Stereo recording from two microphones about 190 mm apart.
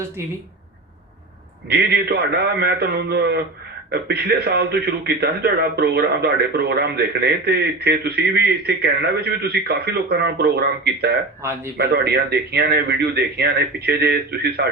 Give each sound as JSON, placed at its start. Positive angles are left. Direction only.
{"t": 1.7, "sound": "a man's voice", "side_deg": -60}
{"t": 11.4, "sound": "a man's voice", "side_deg": -15}
{"t": 11.8, "sound": "a man's voice", "side_deg": -60}